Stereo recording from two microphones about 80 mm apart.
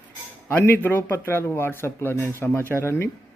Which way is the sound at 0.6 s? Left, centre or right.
Left.